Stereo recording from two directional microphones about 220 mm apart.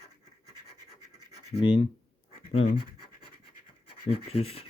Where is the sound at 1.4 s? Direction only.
25° left (ahead or behind).